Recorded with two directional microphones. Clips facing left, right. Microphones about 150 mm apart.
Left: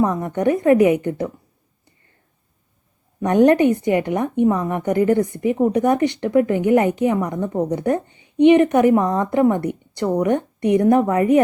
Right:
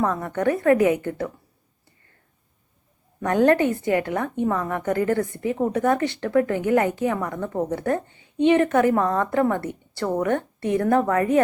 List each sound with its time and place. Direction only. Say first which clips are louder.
0.0 s a woman's voice: left 4 dB; 20° left (ahead or behind)
3.2 s a woman's voice: left 4 dB; 20° left (ahead or behind)